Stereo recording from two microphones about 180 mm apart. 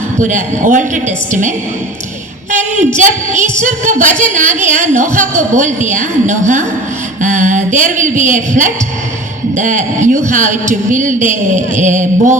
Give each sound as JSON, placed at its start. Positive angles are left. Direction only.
{"t": 0.2, "sound": "a woman's voice", "side_deg": -45}
{"t": 2.5, "sound": "a sound", "side_deg": -45}
{"t": 3.3, "sound": "music", "side_deg": -15}
{"t": 3.6, "sound": "a woman's voice", "side_deg": -45}